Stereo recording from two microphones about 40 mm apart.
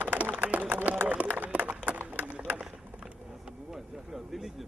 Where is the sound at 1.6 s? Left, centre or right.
Right.